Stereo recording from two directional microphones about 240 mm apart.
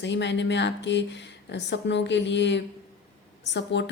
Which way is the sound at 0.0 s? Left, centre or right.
Left.